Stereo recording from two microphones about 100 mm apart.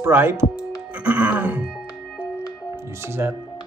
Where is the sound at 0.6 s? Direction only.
15° right (ahead or behind).